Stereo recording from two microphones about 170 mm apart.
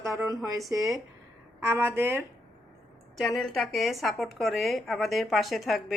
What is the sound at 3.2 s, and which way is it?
Speech, centre (ahead or behind).